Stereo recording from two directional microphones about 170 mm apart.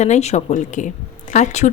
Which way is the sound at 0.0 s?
40° left (ahead or behind).